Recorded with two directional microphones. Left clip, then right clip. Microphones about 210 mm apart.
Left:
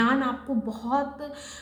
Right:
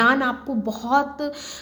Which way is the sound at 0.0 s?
45° right (ahead or behind).